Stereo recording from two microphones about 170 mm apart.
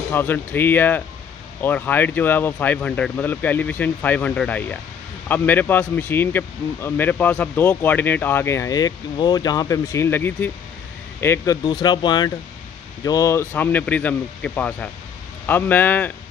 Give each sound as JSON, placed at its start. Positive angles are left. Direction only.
{"t": 0.1, "sound": "speech", "side_deg": 10}